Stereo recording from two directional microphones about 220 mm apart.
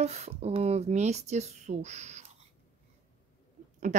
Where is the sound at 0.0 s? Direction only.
30° right (ahead or behind).